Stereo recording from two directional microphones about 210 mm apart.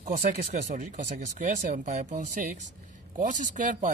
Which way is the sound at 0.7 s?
35° right (ahead or behind).